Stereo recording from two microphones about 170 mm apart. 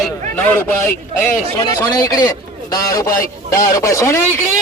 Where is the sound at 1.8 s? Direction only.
20° left (ahead or behind).